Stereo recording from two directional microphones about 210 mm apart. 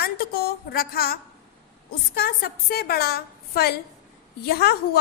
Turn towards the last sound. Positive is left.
turn(degrees=50)  # may be behind; listen again after turning